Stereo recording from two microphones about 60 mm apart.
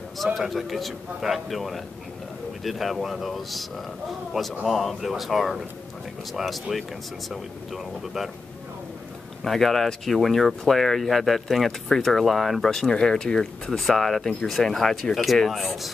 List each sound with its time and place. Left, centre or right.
0.2 s speech: centre
9.4 s speech: centre